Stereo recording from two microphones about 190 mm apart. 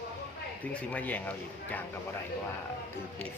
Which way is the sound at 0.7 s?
5° left (ahead or behind).